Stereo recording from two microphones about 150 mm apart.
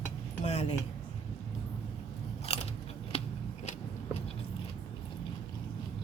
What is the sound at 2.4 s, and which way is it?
Biting, 45° left (ahead or behind).